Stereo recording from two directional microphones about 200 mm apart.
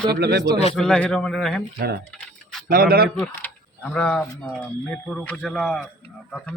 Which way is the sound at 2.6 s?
45° right (ahead or behind).